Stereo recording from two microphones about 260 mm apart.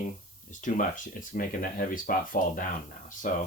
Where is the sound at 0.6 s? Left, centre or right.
Left.